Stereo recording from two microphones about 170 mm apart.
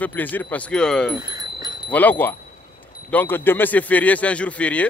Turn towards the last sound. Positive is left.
turn(degrees=10)  # may be behind; listen again after turning